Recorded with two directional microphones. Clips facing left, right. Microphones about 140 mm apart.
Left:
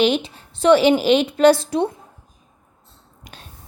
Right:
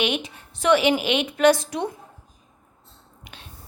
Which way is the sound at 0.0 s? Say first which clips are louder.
Left 7 dB; 30° left (ahead or behind).